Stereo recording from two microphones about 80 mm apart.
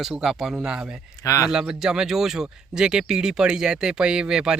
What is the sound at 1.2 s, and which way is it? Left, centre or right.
Speech, left.